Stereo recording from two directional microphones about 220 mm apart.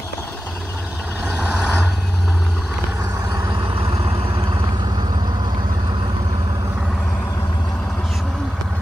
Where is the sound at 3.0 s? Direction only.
15° right (ahead or behind).